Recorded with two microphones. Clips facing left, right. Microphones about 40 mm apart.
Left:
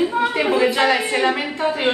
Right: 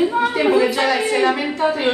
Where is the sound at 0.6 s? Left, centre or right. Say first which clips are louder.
Even; left.